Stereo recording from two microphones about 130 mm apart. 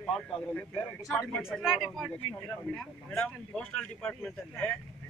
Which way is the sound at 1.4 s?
5° right (ahead or behind).